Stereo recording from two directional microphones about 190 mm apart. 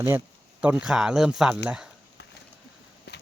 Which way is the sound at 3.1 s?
60° left (ahead or behind).